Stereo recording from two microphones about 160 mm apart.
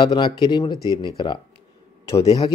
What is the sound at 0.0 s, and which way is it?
Speech, 30° left (ahead or behind).